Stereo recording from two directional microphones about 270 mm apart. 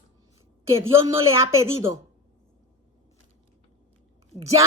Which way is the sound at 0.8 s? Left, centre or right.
Centre.